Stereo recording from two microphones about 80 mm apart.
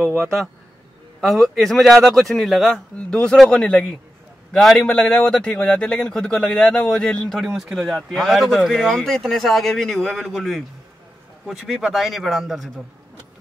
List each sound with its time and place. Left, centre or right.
0.0 s a man's voice: right
1.2 s a man's voice: centre
7.4 s speech: centre